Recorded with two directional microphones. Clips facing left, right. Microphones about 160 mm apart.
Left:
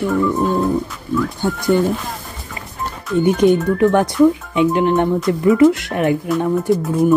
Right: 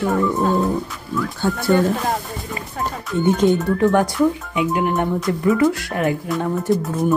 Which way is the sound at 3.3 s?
15° left (ahead or behind).